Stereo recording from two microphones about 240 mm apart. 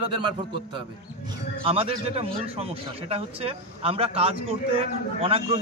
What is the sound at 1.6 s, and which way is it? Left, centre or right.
A man's voice, right.